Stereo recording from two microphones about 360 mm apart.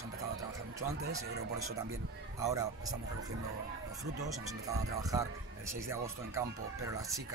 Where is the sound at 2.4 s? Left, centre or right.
Centre.